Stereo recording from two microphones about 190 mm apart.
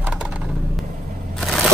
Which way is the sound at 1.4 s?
Centre (ahead or behind).